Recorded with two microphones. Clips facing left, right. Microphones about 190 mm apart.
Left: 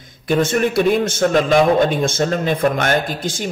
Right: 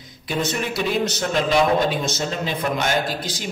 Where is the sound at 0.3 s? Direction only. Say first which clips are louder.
Left 8 dB; 50° left (ahead or behind).